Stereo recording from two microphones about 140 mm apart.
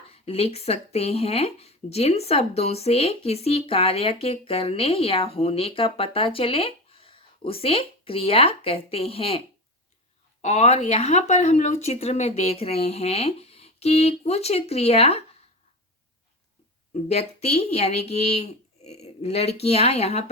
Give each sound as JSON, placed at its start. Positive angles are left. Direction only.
{"t": 0.1, "sound": "speech", "side_deg": 45}
{"t": 10.4, "sound": "speech", "side_deg": 55}
{"t": 16.9, "sound": "speech", "side_deg": 50}